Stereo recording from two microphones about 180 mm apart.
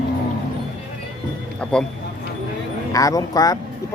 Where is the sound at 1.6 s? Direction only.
5° left (ahead or behind).